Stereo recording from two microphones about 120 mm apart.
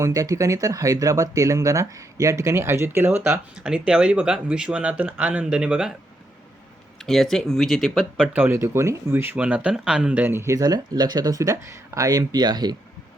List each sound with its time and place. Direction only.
0.0 s speech: 30° right (ahead or behind)
3.6 s speech: 10° right (ahead or behind)
7.0 s speech: centre (ahead or behind)
8.3 s speech: 20° right (ahead or behind); by 12.7 s 35° right (ahead or behind)